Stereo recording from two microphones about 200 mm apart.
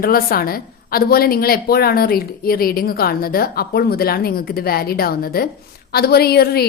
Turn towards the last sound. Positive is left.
turn(degrees=50)  # may be behind; listen again after turning